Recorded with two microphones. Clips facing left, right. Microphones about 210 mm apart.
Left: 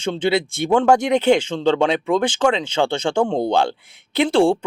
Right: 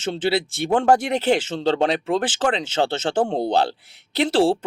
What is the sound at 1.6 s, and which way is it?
Speech, 35° right (ahead or behind).